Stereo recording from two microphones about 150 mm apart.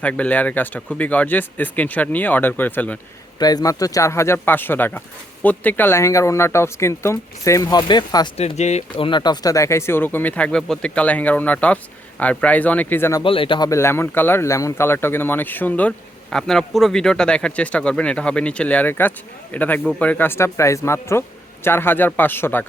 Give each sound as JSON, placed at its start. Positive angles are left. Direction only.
{"t": 0.0, "sound": "speech", "side_deg": 10}
{"t": 3.3, "sound": "speech", "side_deg": 25}
{"t": 8.4, "sound": "speech", "side_deg": 45}
{"t": 9.0, "sound": "speech", "side_deg": 30}
{"t": 13.2, "sound": "a man's voice", "side_deg": 35}
{"t": 13.7, "sound": "speech", "side_deg": 20}